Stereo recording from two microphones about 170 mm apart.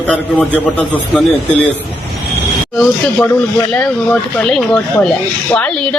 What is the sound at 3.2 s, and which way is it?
Speech, 10° left (ahead or behind).